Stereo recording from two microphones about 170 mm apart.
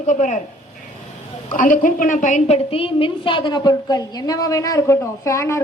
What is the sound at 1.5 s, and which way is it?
A woman's voice, 55° left (ahead or behind).